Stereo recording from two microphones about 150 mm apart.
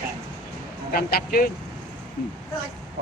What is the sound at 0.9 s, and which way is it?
Speech, 90° left.